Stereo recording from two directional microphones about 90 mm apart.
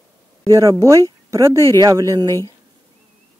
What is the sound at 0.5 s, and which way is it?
Speech, 35° right (ahead or behind).